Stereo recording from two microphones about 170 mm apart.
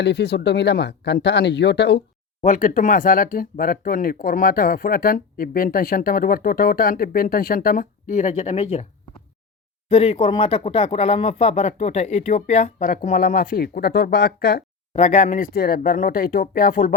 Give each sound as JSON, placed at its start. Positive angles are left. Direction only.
{"t": 0.0, "sound": "speech", "side_deg": 85}
{"t": 2.4, "sound": "speech", "side_deg": 50}
{"t": 9.9, "sound": "speech", "side_deg": 35}
{"t": 14.9, "sound": "speech", "side_deg": 40}